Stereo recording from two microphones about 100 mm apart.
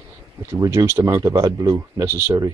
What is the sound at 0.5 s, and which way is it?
Speech, 30° right (ahead or behind).